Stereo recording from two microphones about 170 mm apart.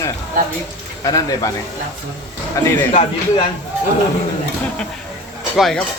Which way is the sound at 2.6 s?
20° left (ahead or behind).